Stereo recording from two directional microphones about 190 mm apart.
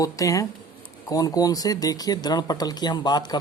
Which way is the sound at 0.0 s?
15° left (ahead or behind).